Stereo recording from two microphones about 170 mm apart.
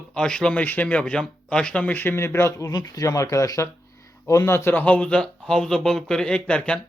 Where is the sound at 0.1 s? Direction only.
5° left (ahead or behind).